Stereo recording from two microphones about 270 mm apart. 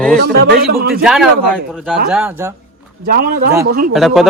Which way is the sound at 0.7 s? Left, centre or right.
Right.